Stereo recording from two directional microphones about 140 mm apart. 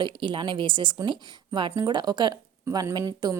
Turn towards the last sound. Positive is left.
turn(degrees=-25)  # may be behind; listen again after turning